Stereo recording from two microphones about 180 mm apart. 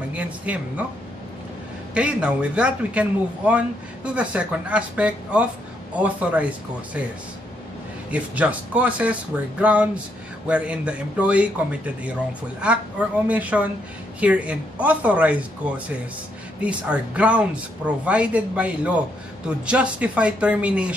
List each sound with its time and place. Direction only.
0.1 s a man's voice: 10° right (ahead or behind)
2.0 s a man's voice: 5° right (ahead or behind)
8.1 s a man's voice: 10° right (ahead or behind)